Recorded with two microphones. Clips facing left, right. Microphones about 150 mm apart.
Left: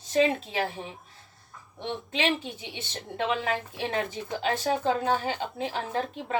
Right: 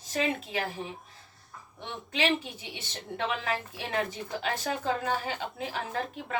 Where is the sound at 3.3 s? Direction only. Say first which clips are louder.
Left 4 dB; 30° left (ahead or behind).